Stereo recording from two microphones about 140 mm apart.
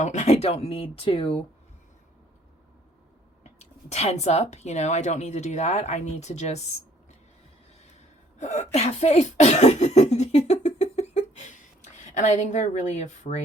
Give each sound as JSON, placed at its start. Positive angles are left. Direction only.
{"t": 0.0, "sound": "speech", "side_deg": 55}
{"t": 3.6, "sound": "speech", "side_deg": 50}
{"t": 8.4, "sound": "cough", "side_deg": 55}